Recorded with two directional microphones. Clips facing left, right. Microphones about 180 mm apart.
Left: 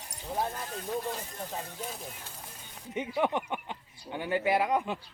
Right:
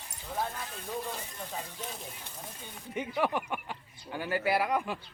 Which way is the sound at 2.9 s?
20° left (ahead or behind).